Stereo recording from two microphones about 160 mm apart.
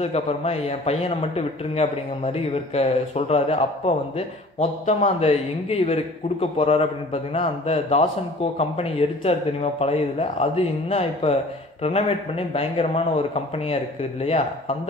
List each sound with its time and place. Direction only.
0.0 s a man's voice: 40° left (ahead or behind)
12.5 s a man's voice: 35° left (ahead or behind)